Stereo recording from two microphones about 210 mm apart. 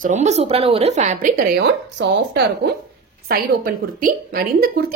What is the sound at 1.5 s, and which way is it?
A woman's voice, 55° right (ahead or behind).